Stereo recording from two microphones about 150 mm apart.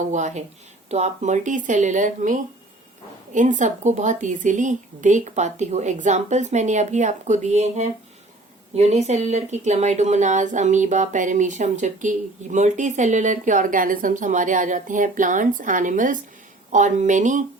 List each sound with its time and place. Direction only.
0.0 s a woman's voice: 55° right (ahead or behind)